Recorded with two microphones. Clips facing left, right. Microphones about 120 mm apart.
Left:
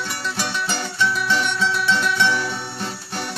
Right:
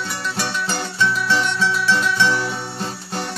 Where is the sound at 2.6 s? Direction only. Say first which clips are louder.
Right 2 dB; 30° right (ahead or behind).